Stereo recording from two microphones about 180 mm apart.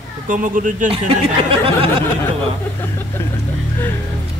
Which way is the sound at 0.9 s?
30° right (ahead or behind).